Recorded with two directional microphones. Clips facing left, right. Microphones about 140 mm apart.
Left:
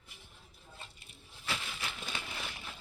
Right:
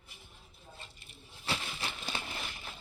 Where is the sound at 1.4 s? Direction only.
30° right (ahead or behind).